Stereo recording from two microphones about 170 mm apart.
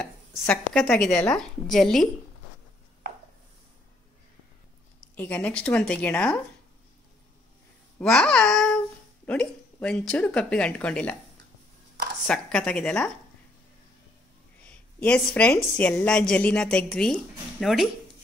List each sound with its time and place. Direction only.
0.0 s a woman's voice: centre (ahead or behind)
5.1 s a woman's voice: 10° left (ahead or behind)
8.0 s a woman's voice: 5° left (ahead or behind)
12.3 s a woman's voice: 5° left (ahead or behind)
14.6 s a woman's voice: 5° left (ahead or behind)